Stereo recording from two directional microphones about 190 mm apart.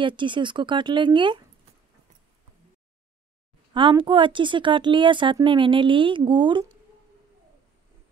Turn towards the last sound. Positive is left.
turn(degrees=-25)  # may be behind; listen again after turning